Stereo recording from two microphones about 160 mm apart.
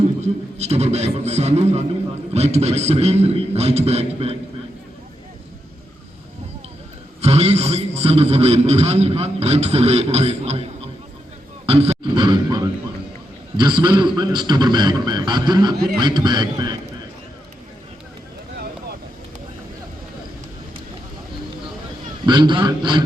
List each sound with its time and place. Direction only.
0.2 s a man's voice: 40° right (ahead or behind)
7.2 s a man's voice: 40° right (ahead or behind)
11.6 s grunt: 40° right (ahead or behind)
12.1 s a sound: 30° right (ahead or behind)
13.6 s a man's voice: 30° right (ahead or behind)
22.3 s a man's voice: 30° right (ahead or behind)